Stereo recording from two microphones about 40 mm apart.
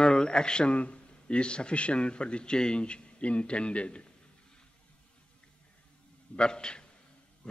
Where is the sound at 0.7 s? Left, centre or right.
Left.